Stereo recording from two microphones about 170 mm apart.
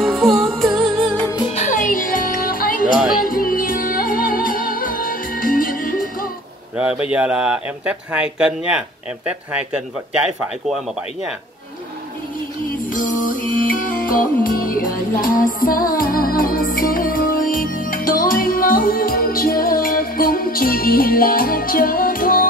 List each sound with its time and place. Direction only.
0.0 s music: centre (ahead or behind)
1.5 s music: 45° left (ahead or behind)
6.8 s speech: 5° right (ahead or behind)
12.9 s music: 50° left (ahead or behind)